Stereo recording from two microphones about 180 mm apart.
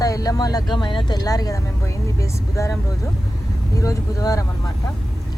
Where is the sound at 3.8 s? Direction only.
20° left (ahead or behind).